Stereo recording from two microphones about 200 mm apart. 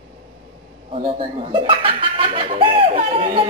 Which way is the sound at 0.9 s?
25° right (ahead or behind).